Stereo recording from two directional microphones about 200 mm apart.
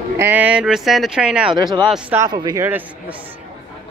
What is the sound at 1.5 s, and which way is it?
Speech, 20° right (ahead or behind).